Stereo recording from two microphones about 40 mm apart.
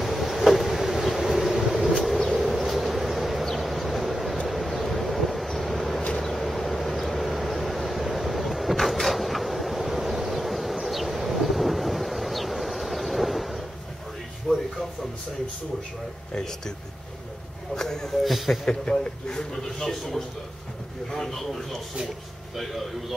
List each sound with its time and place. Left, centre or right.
0.0 s vehicle: centre
3.4 s a sound: centre
4.5 s vehicle: centre
14.5 s a sound: centre
16.3 s a man's voice: centre
17.7 s speech: centre
18.2 s speech: centre
18.7 s a man's voice: centre
21.1 s a man's voice: centre